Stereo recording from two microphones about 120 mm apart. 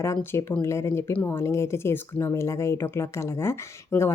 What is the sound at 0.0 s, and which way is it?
Speech, 25° left (ahead or behind).